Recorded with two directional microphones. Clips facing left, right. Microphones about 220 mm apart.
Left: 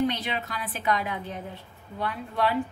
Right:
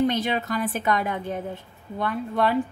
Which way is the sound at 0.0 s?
45° right (ahead or behind).